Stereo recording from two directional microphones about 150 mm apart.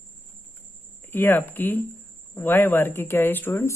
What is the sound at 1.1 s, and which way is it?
A woman's voice, 15° left (ahead or behind).